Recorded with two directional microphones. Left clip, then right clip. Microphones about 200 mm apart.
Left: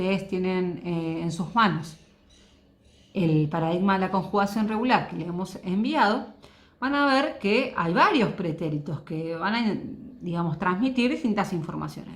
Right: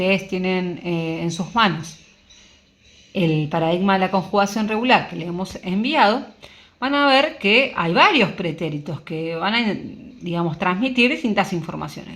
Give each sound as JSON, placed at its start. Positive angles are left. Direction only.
{"t": 0.0, "sound": "speech", "side_deg": -45}
{"t": 3.2, "sound": "speech", "side_deg": -40}